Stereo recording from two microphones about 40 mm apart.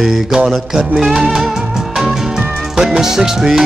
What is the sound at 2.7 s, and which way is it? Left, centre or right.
Speech, centre.